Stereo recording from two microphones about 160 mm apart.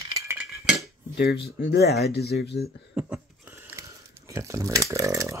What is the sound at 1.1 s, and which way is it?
Speech, 90° left.